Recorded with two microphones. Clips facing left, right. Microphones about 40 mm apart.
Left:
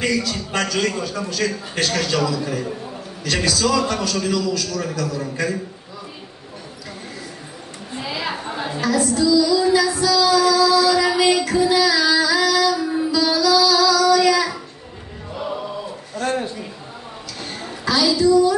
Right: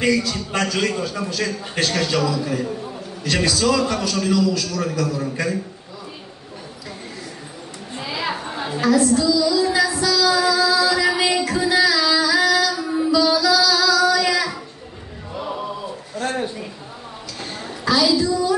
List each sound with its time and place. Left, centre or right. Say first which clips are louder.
0.0 s a man's voice: right 2 dB; centre
8.0 s a sound: right 1 dB; centre
9.2 s music: left 2 dB; centre
10.3 s child singing: left 3 dB; centre
11.0 s female singing: left 2 dB; centre
12.4 s music: right 1 dB; right
13.3 s music: left 1 dB; centre
16.2 s a sound: left 2 dB; centre
17.5 s a sound: right 2 dB; centre